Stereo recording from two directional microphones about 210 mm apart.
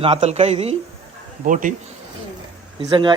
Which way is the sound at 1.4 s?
40° right (ahead or behind).